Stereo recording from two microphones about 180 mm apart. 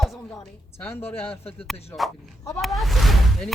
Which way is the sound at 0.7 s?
10° left (ahead or behind).